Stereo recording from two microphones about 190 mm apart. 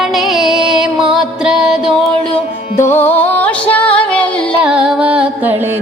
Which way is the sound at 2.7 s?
15° left (ahead or behind).